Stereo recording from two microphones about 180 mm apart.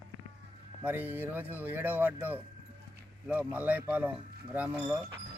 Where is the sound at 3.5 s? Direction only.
10° right (ahead or behind).